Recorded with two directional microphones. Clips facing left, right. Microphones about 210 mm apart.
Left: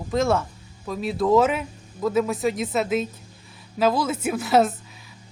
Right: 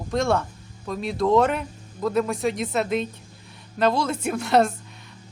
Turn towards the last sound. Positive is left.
turn(degrees=5)  # may be behind; listen again after turning